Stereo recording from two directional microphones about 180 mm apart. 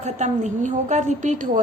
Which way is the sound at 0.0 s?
40° right (ahead or behind).